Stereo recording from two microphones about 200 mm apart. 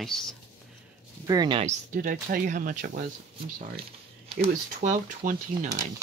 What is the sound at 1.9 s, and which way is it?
Speech, 45° right (ahead or behind).